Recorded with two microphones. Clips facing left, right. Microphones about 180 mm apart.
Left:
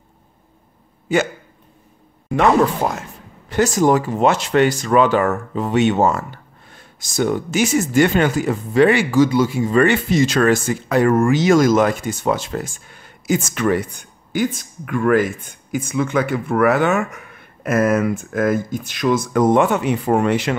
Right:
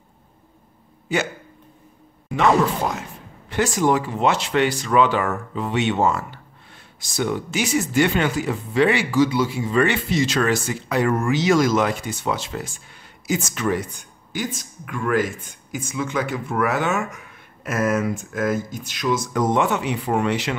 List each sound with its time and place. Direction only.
3.0 s speech: 40° left (ahead or behind)